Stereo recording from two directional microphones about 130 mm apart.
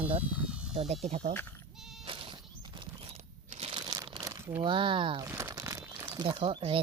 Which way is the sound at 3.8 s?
30° right (ahead or behind).